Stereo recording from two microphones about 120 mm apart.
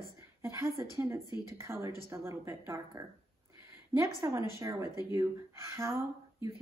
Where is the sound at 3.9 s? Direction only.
25° right (ahead or behind).